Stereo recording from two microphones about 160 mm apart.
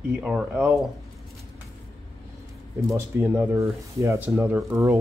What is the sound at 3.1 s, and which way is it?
Speech, 15° right (ahead or behind).